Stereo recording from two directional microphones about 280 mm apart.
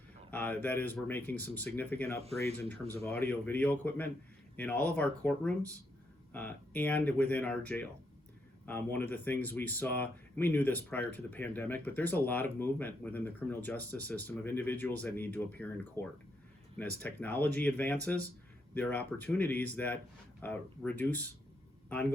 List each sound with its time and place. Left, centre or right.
0.3 s speech: centre
2.2 s speech: right
2.9 s speech: centre